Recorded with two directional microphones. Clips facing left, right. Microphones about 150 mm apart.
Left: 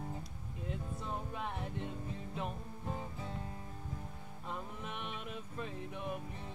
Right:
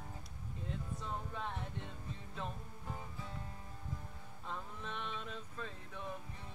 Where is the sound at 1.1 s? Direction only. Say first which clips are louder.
Left 2 dB; 15° left (ahead or behind).